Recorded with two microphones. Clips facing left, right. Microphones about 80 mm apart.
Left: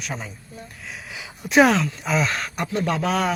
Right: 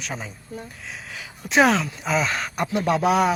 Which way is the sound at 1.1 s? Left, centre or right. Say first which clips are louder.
Left 1 dB; centre.